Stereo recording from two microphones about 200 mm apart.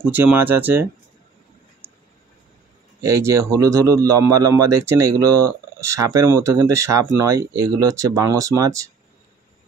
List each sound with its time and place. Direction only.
0.0 s speech: 10° right (ahead or behind)
3.0 s speech: 15° right (ahead or behind)